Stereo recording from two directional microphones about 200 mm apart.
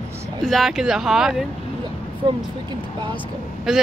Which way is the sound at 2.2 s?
25° right (ahead or behind).